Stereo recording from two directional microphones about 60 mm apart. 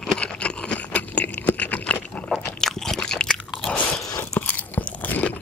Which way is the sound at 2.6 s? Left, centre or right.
Centre.